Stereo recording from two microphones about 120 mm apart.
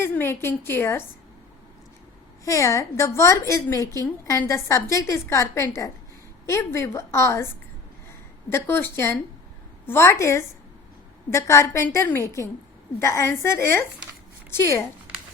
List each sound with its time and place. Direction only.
0.0 s a woman's voice: 20° left (ahead or behind)
2.4 s a woman's voice: 25° left (ahead or behind)
8.4 s a woman's voice: 20° left (ahead or behind)